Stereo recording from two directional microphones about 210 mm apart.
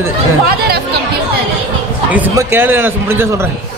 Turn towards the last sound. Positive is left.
turn(degrees=-10)  # may be behind; listen again after turning